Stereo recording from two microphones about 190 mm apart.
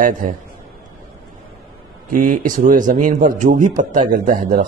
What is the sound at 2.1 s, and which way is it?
Speech, 45° right (ahead or behind).